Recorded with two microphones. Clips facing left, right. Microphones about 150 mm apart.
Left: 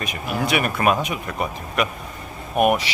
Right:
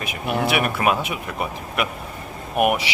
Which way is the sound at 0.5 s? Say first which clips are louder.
Left 3 dB; 5° right (ahead or behind).